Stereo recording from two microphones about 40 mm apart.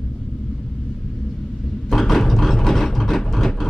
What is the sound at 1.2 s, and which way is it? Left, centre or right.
Mechanisms, centre.